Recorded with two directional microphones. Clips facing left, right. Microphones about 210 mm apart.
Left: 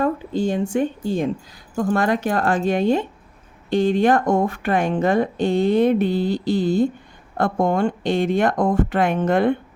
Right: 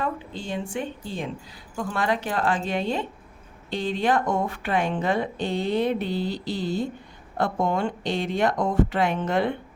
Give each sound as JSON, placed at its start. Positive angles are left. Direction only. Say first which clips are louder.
{"t": 0.0, "sound": "speech", "louder": "left 10 dB", "side_deg": 45}